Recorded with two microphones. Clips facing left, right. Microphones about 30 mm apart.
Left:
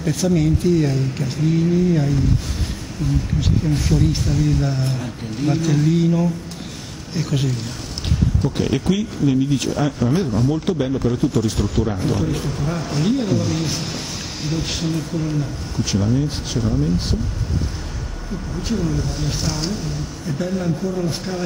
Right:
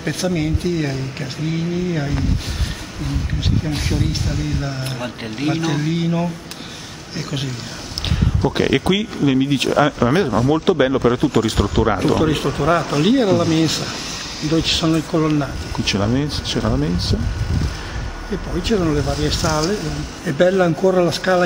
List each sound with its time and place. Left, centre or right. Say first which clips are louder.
0.0 s speech: left 2 dB; right
3.3 s speech: even; right
5.0 s speech: right 1 dB; right; by 7.5 s centre
8.5 s speech: right 5 dB; right
10.3 s speech: right 4 dB; right
10.6 s speech: right 5 dB; right
12.2 s speech: right 5 dB; right
13.4 s speech: right 7 dB; right
14.5 s speech: right 7 dB; right
15.7 s speech: right 1 dB; right
18.3 s speech: right 5 dB; right
19.7 s speech: right 4 dB; right